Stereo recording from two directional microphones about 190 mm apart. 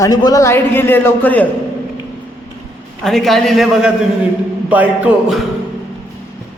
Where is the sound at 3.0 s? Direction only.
Centre (ahead or behind).